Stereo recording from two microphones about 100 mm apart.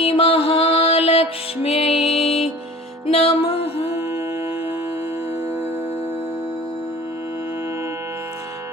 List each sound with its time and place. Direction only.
0.0 s music: 75° left (ahead or behind)